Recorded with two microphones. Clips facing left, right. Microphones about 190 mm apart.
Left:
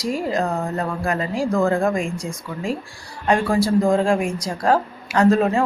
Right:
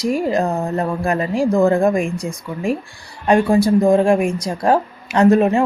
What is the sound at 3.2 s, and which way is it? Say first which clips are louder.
Speech: right 5 dB; 20° right (ahead or behind).